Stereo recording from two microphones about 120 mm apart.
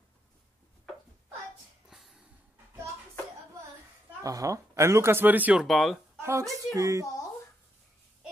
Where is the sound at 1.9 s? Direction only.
5° right (ahead or behind).